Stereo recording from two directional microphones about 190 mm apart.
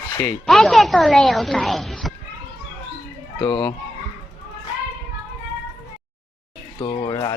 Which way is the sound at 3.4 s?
20° left (ahead or behind).